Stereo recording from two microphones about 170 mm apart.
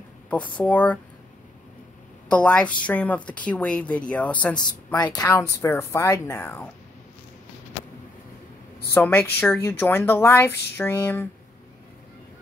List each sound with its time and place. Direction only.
0.6 s a woman's voice: 10° left (ahead or behind)
2.2 s a woman's voice: 5° left (ahead or behind)
4.9 s a woman's voice: 25° left (ahead or behind)
8.9 s a woman's voice: 10° left (ahead or behind)